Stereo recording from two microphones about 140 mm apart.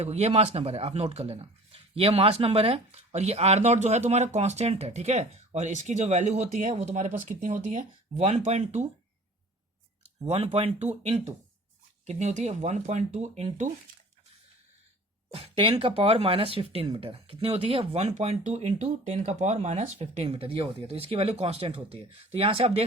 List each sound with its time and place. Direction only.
0.0 s speech: 50° right (ahead or behind)
10.2 s speech: 45° right (ahead or behind)
12.0 s speech: 55° right (ahead or behind)
15.3 s speech: 40° right (ahead or behind)